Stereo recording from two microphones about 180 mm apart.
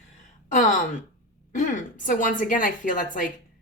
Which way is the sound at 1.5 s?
45° left (ahead or behind).